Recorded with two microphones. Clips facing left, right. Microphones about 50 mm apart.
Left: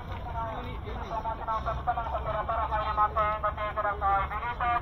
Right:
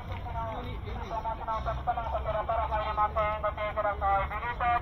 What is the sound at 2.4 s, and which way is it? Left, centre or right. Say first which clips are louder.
Speech: left 1 dB; centre.